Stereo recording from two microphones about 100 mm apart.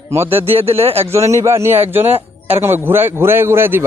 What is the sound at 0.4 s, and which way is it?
Speech, 75° right (ahead or behind).